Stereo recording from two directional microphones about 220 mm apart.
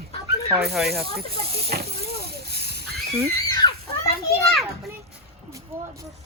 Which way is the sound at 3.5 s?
15° left (ahead or behind).